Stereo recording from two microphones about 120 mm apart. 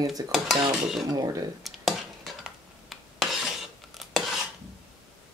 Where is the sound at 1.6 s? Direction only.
Centre (ahead or behind).